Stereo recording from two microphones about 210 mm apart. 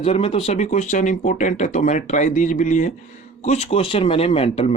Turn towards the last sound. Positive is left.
turn(degrees=30)  # may be behind; listen again after turning